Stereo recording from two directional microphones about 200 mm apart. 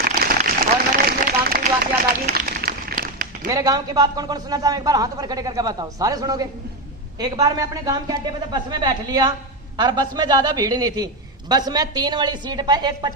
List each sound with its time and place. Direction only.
0.3 s a sound: 45° right (ahead or behind)
2.3 s run: 45° right (ahead or behind)
3.5 s a man's voice: 15° right (ahead or behind)